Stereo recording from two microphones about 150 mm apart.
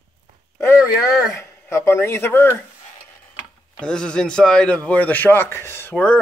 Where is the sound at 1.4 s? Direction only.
15° left (ahead or behind).